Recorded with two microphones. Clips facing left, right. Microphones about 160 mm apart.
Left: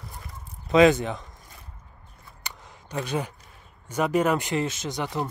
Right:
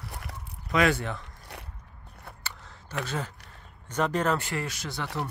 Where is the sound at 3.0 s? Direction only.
15° left (ahead or behind).